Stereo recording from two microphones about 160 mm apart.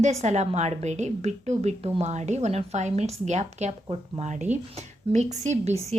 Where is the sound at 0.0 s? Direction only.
45° right (ahead or behind).